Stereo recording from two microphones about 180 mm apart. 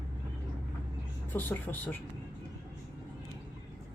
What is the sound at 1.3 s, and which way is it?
Speech, 10° left (ahead or behind).